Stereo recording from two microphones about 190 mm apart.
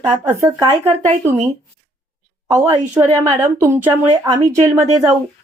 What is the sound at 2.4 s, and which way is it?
A woman's voice, 15° right (ahead or behind).